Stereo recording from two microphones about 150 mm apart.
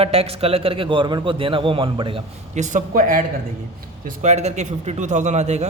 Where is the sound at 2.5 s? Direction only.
55° right (ahead or behind).